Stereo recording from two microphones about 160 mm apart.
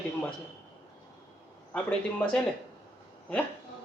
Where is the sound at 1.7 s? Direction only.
10° left (ahead or behind).